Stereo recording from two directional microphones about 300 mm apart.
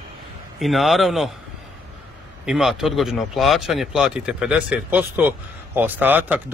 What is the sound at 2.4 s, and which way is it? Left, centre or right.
Speech, centre.